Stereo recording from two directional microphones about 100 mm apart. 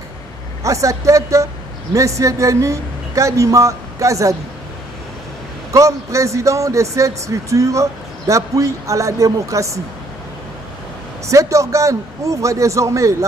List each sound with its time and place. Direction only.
0.7 s a man's voice: 30° right (ahead or behind)
5.7 s a man's voice: 30° right (ahead or behind)
11.2 s a man's voice: 30° right (ahead or behind)